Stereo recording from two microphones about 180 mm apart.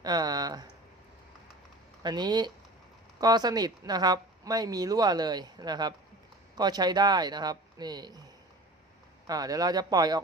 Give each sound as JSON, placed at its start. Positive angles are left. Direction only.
{"t": 0.0, "sound": "a sound", "side_deg": -20}
{"t": 2.0, "sound": "speech", "side_deg": -25}
{"t": 9.2, "sound": "speech", "side_deg": -20}